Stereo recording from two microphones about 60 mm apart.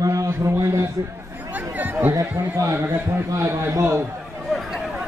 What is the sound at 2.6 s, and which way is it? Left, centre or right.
A man's voice, right.